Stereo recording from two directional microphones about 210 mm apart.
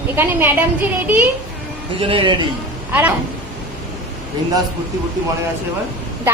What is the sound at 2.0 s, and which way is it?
Speech, 25° right (ahead or behind).